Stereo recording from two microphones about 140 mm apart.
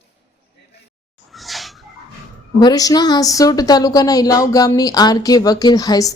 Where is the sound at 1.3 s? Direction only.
Centre (ahead or behind).